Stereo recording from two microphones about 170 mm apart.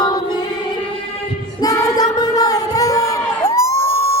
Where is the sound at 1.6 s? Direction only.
20° left (ahead or behind).